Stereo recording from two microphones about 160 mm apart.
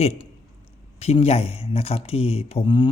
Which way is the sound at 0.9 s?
40° left (ahead or behind).